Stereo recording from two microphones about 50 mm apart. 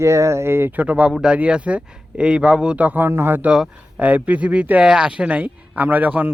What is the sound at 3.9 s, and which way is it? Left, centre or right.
Speech, right.